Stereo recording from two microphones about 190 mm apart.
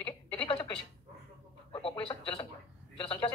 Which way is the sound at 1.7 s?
25° left (ahead or behind).